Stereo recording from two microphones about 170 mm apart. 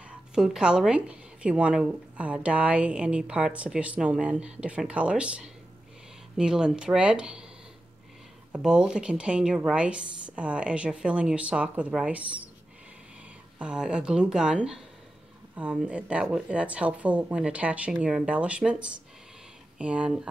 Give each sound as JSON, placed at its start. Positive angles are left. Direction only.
{"t": 0.3, "sound": "a woman's voice", "side_deg": -5}
{"t": 8.5, "sound": "speech", "side_deg": -5}
{"t": 13.6, "sound": "a woman's voice", "side_deg": -5}